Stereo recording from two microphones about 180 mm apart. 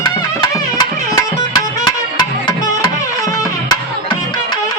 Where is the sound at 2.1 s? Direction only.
25° left (ahead or behind).